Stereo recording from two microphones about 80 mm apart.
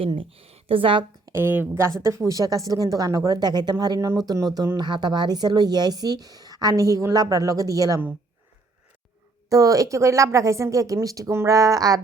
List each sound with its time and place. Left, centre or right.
0.8 s a woman's voice: right
1.3 s a sound: right
2.0 s a woman's voice: right
4.8 s a woman's voice: right
9.5 s a woman's voice: right